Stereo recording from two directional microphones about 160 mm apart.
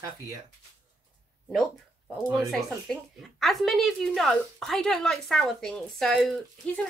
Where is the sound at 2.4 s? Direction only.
Centre (ahead or behind).